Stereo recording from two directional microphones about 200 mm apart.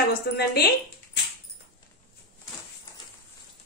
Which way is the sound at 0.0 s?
50° left (ahead or behind).